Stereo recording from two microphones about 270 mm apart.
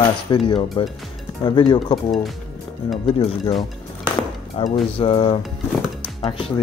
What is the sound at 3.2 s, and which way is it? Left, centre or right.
Speech, left.